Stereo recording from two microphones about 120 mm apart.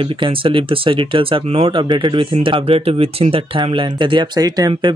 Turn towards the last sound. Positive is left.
turn(degrees=-35)  # may be behind; listen again after turning